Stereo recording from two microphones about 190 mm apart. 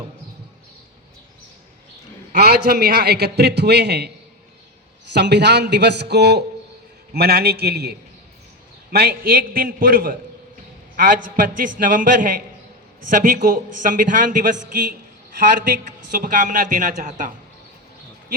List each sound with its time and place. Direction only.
2.3 s a man's voice: 55° right (ahead or behind)
5.1 s a man's voice: 65° right (ahead or behind); by 17.3 s 45° right (ahead or behind)